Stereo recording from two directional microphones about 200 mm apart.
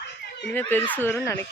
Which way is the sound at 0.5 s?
10° left (ahead or behind).